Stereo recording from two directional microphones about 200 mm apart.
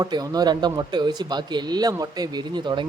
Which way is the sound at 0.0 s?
20° right (ahead or behind).